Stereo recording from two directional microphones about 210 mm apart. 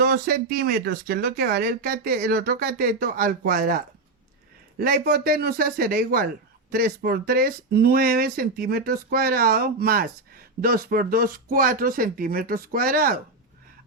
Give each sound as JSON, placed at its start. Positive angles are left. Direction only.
{"t": 0.0, "sound": "speech", "side_deg": -45}